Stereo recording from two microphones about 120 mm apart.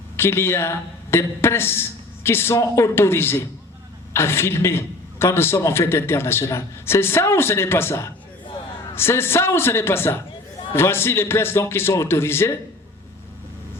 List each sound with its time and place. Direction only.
0.2 s a man's voice: 20° left (ahead or behind)